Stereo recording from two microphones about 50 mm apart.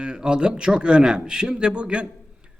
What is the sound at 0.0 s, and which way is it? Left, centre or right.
A man's voice, centre.